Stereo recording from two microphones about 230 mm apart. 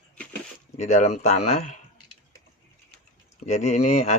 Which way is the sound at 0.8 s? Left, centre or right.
Left.